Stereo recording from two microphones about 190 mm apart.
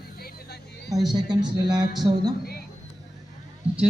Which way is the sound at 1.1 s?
20° right (ahead or behind).